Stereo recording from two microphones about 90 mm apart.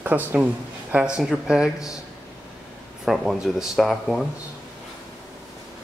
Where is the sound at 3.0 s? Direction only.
5° right (ahead or behind).